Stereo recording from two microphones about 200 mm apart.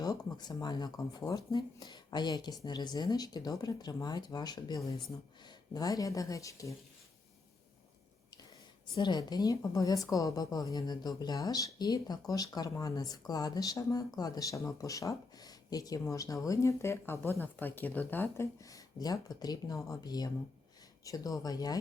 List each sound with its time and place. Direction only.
0.0 s a woman's voice: 20° left (ahead or behind)
9.0 s a woman's voice: 20° left (ahead or behind)